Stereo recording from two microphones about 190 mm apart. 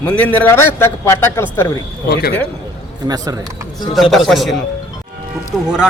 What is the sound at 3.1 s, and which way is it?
Speech, 20° right (ahead or behind).